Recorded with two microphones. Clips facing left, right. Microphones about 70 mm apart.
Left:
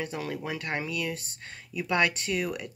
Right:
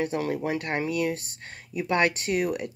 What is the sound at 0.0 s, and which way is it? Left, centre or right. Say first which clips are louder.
Speech: right 6 dB; right.